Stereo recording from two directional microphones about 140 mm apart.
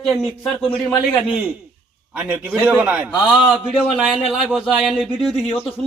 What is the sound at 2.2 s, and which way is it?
A man's voice, 10° right (ahead or behind).